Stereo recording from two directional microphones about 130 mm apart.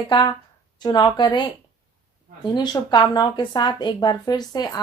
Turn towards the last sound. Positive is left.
turn(degrees=30)  # may be behind; listen again after turning